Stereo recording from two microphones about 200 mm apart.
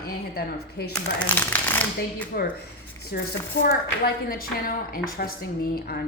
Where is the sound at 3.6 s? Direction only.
50° left (ahead or behind).